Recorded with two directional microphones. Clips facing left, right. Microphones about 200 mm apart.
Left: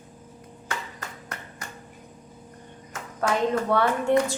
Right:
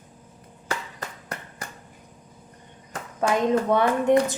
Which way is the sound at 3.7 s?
15° right (ahead or behind).